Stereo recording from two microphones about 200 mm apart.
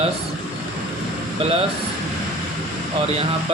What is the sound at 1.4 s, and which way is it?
Speech, 30° right (ahead or behind).